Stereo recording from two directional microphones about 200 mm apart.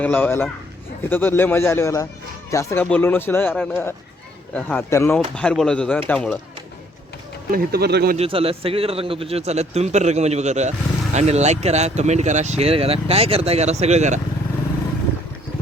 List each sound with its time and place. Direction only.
0.0 s speech: 10° left (ahead or behind)
7.5 s speech: 50° right (ahead or behind)
8.1 s a man's voice: 30° right (ahead or behind)